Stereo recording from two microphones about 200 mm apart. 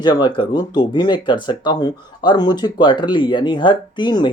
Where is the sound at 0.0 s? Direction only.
20° left (ahead or behind).